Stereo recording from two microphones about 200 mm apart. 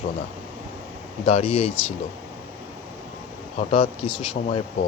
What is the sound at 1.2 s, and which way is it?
Speech, 30° left (ahead or behind).